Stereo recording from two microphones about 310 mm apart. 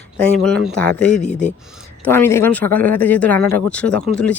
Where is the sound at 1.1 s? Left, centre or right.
Left.